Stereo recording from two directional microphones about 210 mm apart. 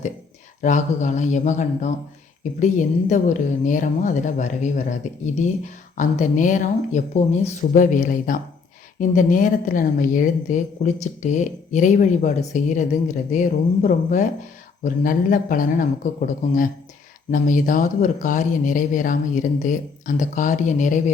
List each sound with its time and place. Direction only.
0.6 s speech: 35° left (ahead or behind)